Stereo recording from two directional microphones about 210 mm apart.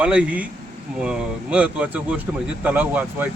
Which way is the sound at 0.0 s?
5° right (ahead or behind).